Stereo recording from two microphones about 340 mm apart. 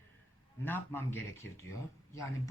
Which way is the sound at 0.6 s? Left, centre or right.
Centre.